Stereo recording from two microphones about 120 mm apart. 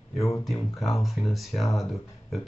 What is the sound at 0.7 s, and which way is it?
Speech, centre (ahead or behind).